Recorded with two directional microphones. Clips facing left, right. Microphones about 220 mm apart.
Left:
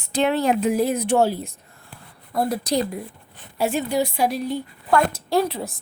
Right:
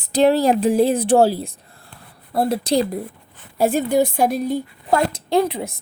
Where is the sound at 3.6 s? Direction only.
50° right (ahead or behind).